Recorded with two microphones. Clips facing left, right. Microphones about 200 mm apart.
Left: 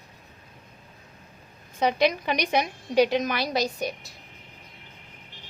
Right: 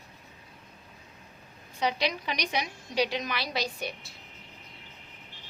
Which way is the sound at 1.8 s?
50° left (ahead or behind).